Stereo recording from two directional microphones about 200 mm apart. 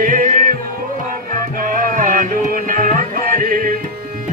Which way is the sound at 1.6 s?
45° right (ahead or behind).